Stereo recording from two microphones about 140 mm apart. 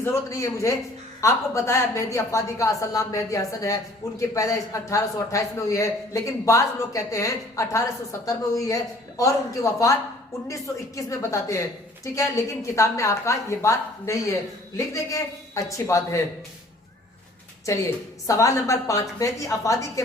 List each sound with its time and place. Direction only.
0.0 s a man's voice: 20° left (ahead or behind)
17.7 s a man's voice: 20° left (ahead or behind)